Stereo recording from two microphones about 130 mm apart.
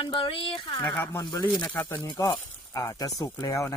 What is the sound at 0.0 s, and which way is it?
Speech, 40° left (ahead or behind).